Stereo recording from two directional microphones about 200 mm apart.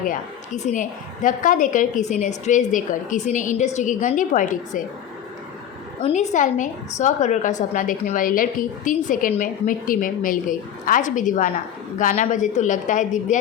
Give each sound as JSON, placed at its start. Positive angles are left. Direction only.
{"t": 0.0, "sound": "a woman's voice", "side_deg": 40}
{"t": 6.0, "sound": "a woman's voice", "side_deg": 35}